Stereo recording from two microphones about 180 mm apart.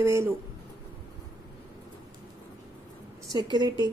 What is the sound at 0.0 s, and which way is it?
Speech, 15° right (ahead or behind).